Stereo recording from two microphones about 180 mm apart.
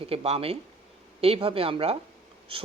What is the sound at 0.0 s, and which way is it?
Speech, 35° right (ahead or behind).